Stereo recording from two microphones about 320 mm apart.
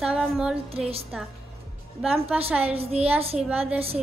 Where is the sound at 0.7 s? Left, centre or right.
Centre.